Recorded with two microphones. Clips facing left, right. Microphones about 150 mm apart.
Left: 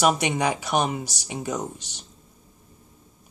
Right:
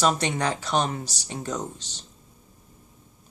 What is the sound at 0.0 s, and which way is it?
Speech, 15° left (ahead or behind).